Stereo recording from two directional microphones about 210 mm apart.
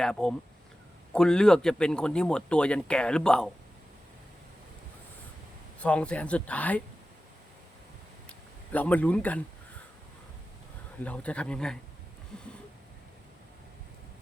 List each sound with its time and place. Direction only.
0.0 s speech: 5° left (ahead or behind)
5.8 s speech: 5° left (ahead or behind)
8.7 s speech: 5° left (ahead or behind)
11.0 s speech: 5° left (ahead or behind)
12.3 s a sound: 5° left (ahead or behind)